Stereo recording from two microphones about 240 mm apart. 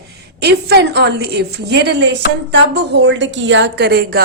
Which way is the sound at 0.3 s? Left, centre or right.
Right.